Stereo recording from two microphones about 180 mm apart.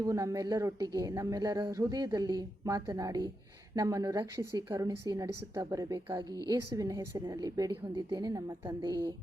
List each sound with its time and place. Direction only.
0.0 s a woman's voice: 15° right (ahead or behind)